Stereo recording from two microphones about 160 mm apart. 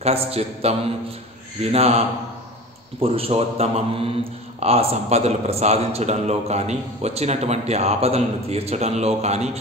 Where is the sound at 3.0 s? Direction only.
35° right (ahead or behind).